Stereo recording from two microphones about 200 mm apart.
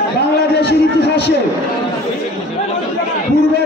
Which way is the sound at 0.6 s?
55° left (ahead or behind).